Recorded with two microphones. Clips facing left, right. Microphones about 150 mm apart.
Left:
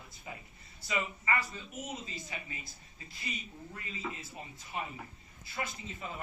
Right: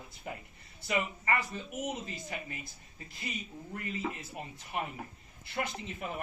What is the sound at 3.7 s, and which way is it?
Speech, 55° right (ahead or behind).